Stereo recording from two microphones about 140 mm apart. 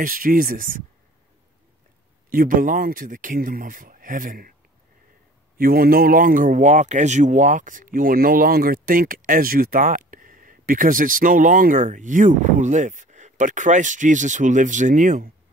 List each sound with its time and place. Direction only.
0.0 s speech: 85° right
2.2 s a man's voice: 80° right
5.6 s a man's voice: 90° right; by 15.3 s 70° right (ahead or behind)